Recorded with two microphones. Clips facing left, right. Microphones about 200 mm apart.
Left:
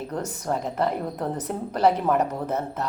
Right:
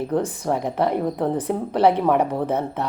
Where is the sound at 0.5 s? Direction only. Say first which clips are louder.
Right 3 dB; 35° right (ahead or behind).